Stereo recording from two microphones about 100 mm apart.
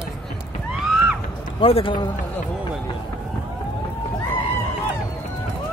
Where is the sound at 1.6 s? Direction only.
65° left (ahead or behind).